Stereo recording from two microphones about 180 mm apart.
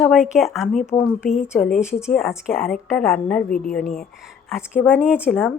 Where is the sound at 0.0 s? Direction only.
Centre (ahead or behind).